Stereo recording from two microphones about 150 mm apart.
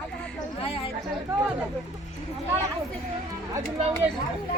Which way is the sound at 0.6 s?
40° left (ahead or behind).